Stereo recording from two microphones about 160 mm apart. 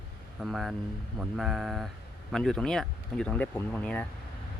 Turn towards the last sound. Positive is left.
turn(degrees=10)  # may be behind; listen again after turning